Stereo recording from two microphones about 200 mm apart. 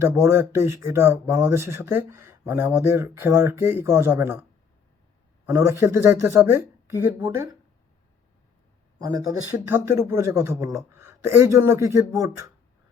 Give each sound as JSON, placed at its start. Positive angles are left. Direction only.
{"t": 0.0, "sound": "speech", "side_deg": -15}
{"t": 5.5, "sound": "speech", "side_deg": -10}
{"t": 9.6, "sound": "speech", "side_deg": -15}